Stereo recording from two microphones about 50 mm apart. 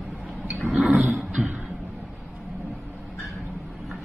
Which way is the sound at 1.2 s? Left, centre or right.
Right.